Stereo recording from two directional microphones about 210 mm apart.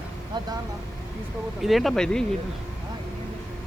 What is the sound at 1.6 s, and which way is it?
Speech, centre (ahead or behind).